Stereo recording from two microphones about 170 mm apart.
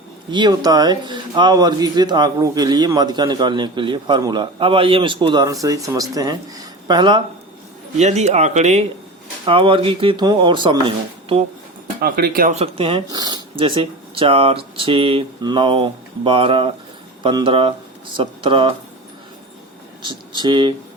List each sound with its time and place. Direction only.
0.3 s speech: 25° right (ahead or behind)
7.9 s speech: 40° right (ahead or behind)
9.5 s speech: 30° right (ahead or behind)
11.9 s speech: 60° right (ahead or behind)
12.5 s speech: 35° right (ahead or behind)
20.0 s speech: 25° right (ahead or behind)